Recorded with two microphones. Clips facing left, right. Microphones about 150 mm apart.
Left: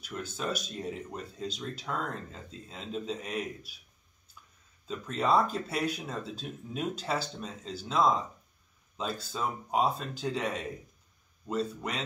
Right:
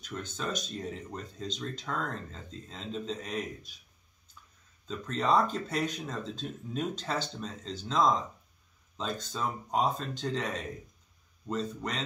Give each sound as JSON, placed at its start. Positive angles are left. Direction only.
{"t": 0.0, "sound": "speech", "side_deg": 10}
{"t": 4.8, "sound": "speech", "side_deg": 10}